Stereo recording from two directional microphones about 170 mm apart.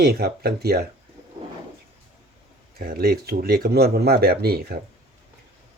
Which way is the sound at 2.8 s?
65° right (ahead or behind).